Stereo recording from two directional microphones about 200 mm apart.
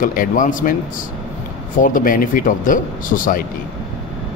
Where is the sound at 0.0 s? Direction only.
45° left (ahead or behind).